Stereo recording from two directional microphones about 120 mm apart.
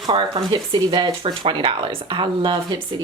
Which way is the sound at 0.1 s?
40° right (ahead or behind).